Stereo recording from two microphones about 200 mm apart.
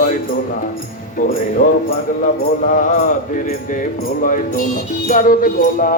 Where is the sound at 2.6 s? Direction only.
40° left (ahead or behind).